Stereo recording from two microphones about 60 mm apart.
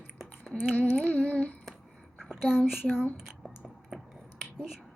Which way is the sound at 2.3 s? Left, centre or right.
Centre.